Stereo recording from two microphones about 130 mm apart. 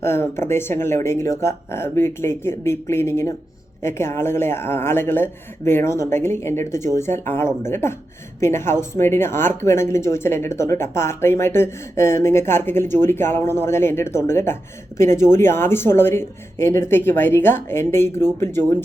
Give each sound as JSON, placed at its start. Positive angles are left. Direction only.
{"t": 0.0, "sound": "speech", "side_deg": 20}